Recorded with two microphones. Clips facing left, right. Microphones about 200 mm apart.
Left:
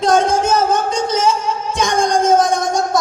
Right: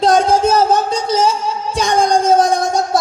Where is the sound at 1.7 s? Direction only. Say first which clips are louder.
Right 2 dB; 30° right (ahead or behind).